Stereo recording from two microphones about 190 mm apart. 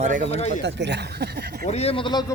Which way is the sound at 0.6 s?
65° right (ahead or behind).